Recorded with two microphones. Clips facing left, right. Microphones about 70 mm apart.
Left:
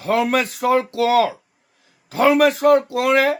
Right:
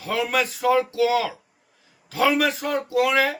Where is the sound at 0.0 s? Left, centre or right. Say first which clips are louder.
Left 5 dB; left.